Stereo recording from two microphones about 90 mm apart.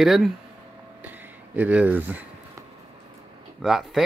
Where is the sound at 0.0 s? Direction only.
Centre (ahead or behind).